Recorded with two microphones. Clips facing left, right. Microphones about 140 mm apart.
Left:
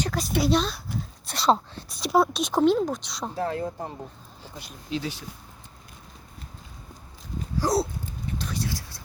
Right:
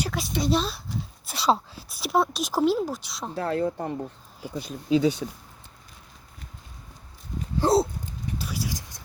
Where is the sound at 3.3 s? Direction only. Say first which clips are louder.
Right 3 dB; 65° right (ahead or behind).